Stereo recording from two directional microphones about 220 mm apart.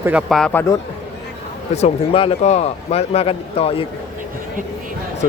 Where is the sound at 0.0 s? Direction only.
5° right (ahead or behind).